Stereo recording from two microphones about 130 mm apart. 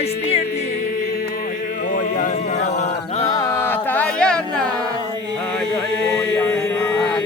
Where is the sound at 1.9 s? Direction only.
85° left; by 3.2 s 60° left (ahead or behind).